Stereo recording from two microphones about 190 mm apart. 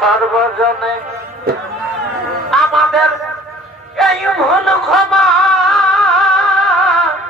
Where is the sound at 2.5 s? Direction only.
Centre (ahead or behind).